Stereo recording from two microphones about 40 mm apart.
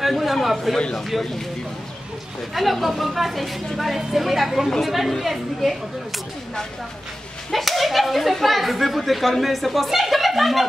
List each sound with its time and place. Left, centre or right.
0.0 s a man's voice: centre
0.7 s speech: left
2.5 s speech: centre
7.5 s speech: centre